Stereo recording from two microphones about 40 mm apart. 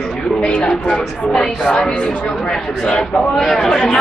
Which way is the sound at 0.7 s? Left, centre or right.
Centre.